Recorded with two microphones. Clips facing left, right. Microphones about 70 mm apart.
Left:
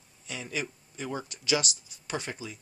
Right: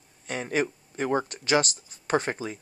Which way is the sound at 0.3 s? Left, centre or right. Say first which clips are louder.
Right 8 dB; right.